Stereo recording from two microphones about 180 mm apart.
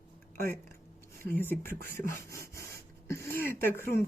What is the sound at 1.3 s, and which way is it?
Speech, 10° left (ahead or behind).